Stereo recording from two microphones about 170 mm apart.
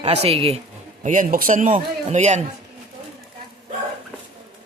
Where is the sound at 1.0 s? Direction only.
50° right (ahead or behind).